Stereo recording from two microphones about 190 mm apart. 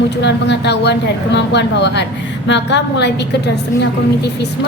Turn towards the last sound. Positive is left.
turn(degrees=60)  # may be behind; listen again after turning